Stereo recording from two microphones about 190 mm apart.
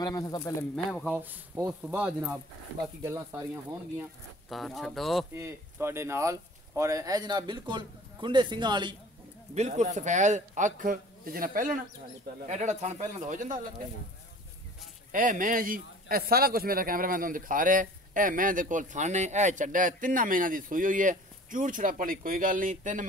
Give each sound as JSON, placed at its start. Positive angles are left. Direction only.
{"t": 0.0, "sound": "speech", "side_deg": 20}
{"t": 0.4, "sound": "speech", "side_deg": 10}
{"t": 1.1, "sound": "speech", "side_deg": -10}
{"t": 4.5, "sound": "speech", "side_deg": 0}
{"t": 5.3, "sound": "speech", "side_deg": -15}
{"t": 9.5, "sound": "a man's voice", "side_deg": -35}
{"t": 15.0, "sound": "a man's voice", "side_deg": -45}